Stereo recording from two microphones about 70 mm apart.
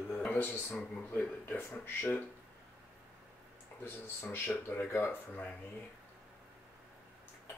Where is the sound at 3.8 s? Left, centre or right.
Left.